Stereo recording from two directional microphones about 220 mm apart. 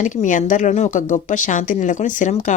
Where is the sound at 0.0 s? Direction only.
35° left (ahead or behind).